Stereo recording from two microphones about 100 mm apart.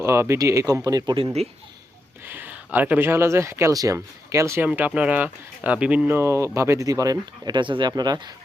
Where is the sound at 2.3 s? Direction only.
15° right (ahead or behind).